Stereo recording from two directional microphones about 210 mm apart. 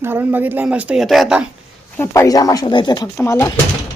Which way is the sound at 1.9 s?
10° left (ahead or behind).